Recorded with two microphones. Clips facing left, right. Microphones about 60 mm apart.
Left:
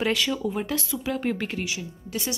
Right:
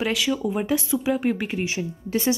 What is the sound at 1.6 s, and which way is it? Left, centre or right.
Speech, right.